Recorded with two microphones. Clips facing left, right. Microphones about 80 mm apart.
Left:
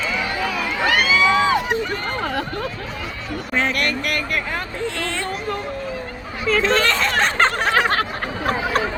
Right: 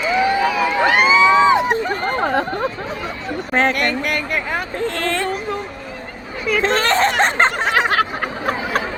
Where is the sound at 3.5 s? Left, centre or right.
Right.